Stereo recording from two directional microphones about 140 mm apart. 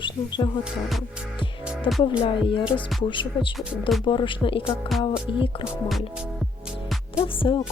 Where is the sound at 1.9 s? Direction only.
35° left (ahead or behind).